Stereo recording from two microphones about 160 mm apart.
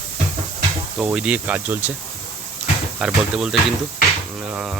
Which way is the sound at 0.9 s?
5° right (ahead or behind).